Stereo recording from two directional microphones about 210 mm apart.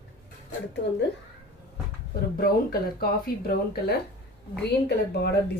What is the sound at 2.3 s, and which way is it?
Speech, 45° left (ahead or behind).